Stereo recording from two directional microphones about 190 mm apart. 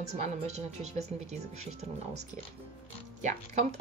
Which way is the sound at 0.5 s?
35° right (ahead or behind).